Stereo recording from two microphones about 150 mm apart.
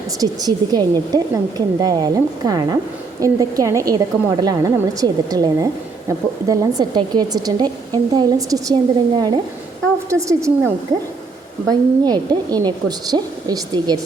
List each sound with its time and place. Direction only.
0.2 s a woman's voice: 25° right (ahead or behind)
11.7 s a woman's voice: 25° right (ahead or behind)